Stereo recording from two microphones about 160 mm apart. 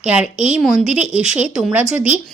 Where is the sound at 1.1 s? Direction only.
45° left (ahead or behind).